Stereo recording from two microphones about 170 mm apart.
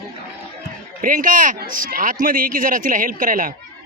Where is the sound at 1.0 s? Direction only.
50° right (ahead or behind).